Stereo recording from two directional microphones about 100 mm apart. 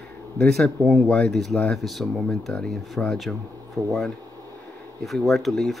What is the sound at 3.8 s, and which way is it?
Speech, 35° right (ahead or behind).